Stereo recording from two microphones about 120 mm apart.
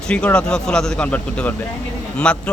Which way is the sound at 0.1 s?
10° left (ahead or behind).